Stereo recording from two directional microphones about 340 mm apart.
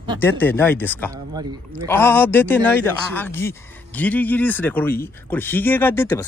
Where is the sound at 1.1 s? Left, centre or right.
Centre.